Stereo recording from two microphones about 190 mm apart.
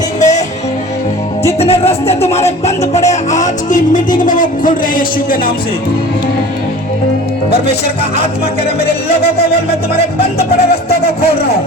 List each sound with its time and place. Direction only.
0.2 s music: 40° left (ahead or behind)
1.5 s music: 30° left (ahead or behind); by 5.5 s 50° left (ahead or behind)
10.2 s music: 55° left (ahead or behind)